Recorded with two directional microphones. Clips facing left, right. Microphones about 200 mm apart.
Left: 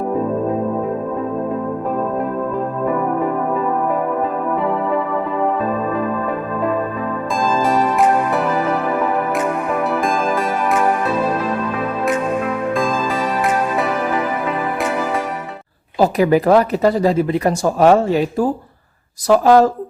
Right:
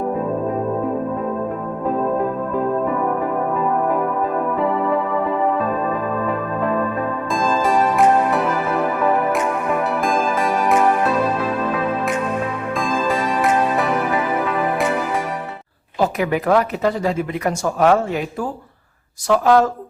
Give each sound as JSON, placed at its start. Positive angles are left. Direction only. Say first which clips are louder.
{"t": 7.6, "sound": "music", "louder": "even", "side_deg": 0}
{"t": 9.9, "sound": "music", "louder": "left 1 dB", "side_deg": 0}
{"t": 12.7, "sound": "music", "louder": "right 2 dB", "side_deg": 0}
{"t": 16.0, "sound": "speech", "louder": "left 5 dB", "side_deg": 35}